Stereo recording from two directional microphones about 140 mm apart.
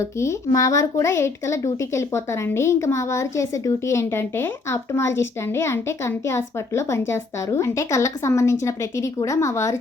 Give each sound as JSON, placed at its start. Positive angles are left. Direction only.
{"t": 0.0, "sound": "a woman's voice", "side_deg": 20}